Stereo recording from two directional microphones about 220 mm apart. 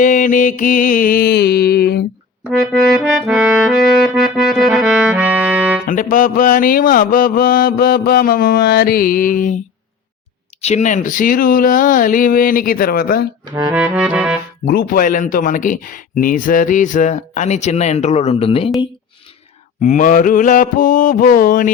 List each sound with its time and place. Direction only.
0.0 s speech: 35° left (ahead or behind)
2.5 s music: centre (ahead or behind)
5.8 s speech: 35° left (ahead or behind)
10.6 s speech: 30° left (ahead or behind)
13.5 s music: 15° right (ahead or behind)
13.7 s music: 5° right (ahead or behind)
14.6 s speech: 45° left (ahead or behind); by 18.7 s 25° left (ahead or behind)
19.8 s speech: 35° left (ahead or behind)